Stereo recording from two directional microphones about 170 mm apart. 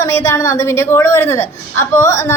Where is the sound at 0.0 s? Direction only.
20° left (ahead or behind).